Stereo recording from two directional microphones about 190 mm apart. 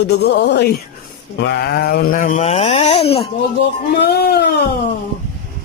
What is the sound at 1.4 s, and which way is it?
Speech, 60° left (ahead or behind).